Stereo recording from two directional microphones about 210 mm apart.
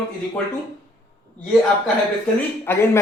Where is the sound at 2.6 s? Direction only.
10° left (ahead or behind).